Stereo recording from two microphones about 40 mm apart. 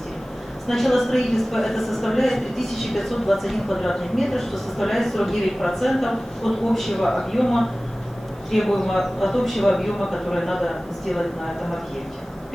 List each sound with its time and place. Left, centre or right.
0.7 s a woman's voice: centre